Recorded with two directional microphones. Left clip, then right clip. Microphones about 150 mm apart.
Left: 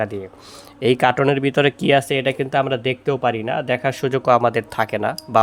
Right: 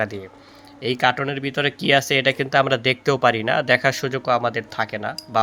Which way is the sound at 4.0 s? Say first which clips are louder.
Left 5 dB; 40° left (ahead or behind).